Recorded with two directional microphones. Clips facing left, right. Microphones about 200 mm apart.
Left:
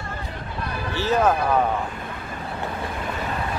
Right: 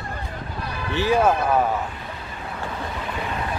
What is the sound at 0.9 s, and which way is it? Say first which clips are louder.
Speech: right 2 dB; 15° right (ahead or behind).